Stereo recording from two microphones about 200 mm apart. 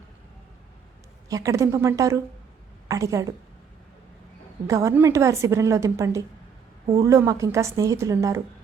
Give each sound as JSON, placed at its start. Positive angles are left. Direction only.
{"t": 1.3, "sound": "a woman's voice", "side_deg": -15}
{"t": 4.6, "sound": "a woman's voice", "side_deg": -15}